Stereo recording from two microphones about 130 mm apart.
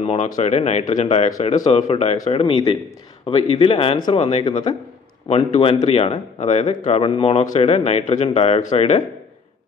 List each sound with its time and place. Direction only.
0.0 s speech: 60° left (ahead or behind)
2.3 s a man's voice: 50° left (ahead or behind)
4.1 s a man's voice: 50° left (ahead or behind)
4.5 s a man's voice: 35° left (ahead or behind)
5.3 s a man's voice: 50° left (ahead or behind)